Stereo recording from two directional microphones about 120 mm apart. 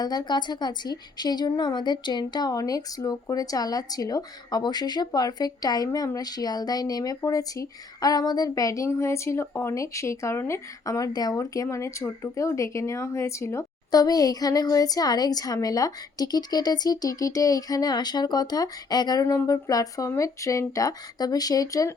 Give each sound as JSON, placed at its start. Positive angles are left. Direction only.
{"t": 0.0, "sound": "a woman's voice", "side_deg": 35}